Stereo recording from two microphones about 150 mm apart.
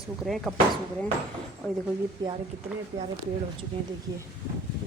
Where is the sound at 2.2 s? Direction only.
30° right (ahead or behind).